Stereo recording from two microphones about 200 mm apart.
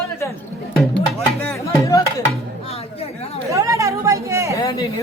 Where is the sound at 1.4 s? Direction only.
5° left (ahead or behind).